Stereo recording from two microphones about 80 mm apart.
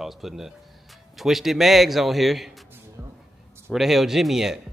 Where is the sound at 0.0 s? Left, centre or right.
Centre.